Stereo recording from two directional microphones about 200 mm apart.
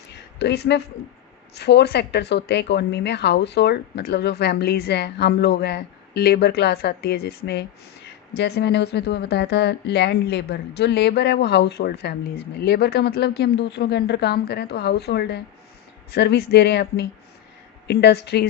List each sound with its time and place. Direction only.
0.3 s speech: 60° left (ahead or behind)